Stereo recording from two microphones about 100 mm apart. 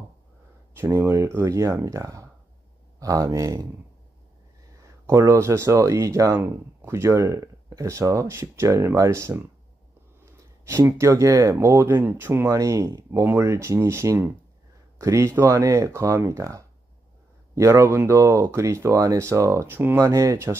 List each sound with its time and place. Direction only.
0.7 s speech: 25° right (ahead or behind)
5.0 s speech: 30° right (ahead or behind)
10.6 s speech: 25° right (ahead or behind)